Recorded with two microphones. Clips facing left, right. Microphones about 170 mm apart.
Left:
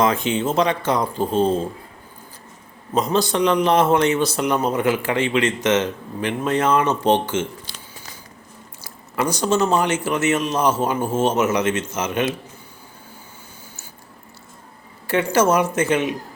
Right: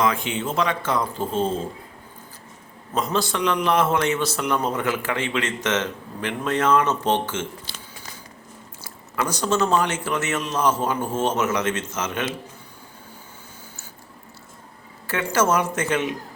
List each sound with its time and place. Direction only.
0.2 s a man's voice: 20° left (ahead or behind)
2.9 s a man's voice: 20° left (ahead or behind)
5.2 s speech: 15° left (ahead or behind)
9.2 s speech: 10° left (ahead or behind)
9.6 s a man's voice: 25° left (ahead or behind)
10.0 s speech: 10° left (ahead or behind)
15.0 s speech: 15° left (ahead or behind)